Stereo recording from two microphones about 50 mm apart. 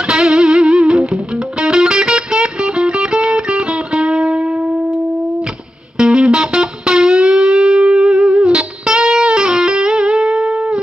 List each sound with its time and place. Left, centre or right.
0.1 s music: centre
5.9 s music: centre